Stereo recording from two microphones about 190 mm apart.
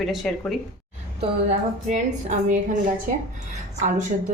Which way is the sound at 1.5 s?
40° right (ahead or behind).